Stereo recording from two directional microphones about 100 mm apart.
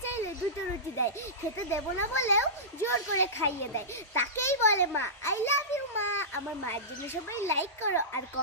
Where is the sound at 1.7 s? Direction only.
25° left (ahead or behind).